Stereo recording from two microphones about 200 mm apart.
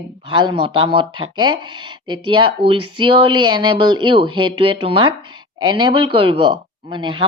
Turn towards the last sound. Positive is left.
turn(degrees=-25)  # may be behind; listen again after turning